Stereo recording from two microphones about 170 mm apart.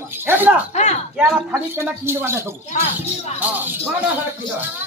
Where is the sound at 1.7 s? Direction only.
15° right (ahead or behind).